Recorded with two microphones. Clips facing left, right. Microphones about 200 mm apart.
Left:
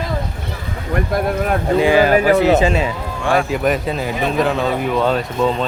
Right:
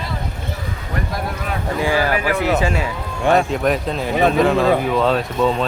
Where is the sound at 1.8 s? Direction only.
20° left (ahead or behind).